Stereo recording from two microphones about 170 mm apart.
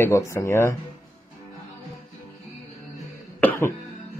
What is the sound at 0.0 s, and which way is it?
Speech, 15° left (ahead or behind).